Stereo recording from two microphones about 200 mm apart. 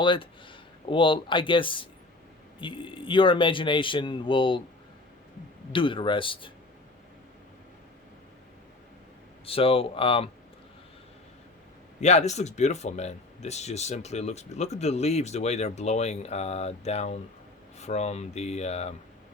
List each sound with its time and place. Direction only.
0.0 s speech: 25° left (ahead or behind)
5.7 s speech: 25° left (ahead or behind)
9.5 s speech: 30° left (ahead or behind)
11.9 s speech: 35° left (ahead or behind)